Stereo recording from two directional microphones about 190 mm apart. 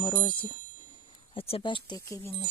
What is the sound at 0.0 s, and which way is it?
Speech, 20° left (ahead or behind).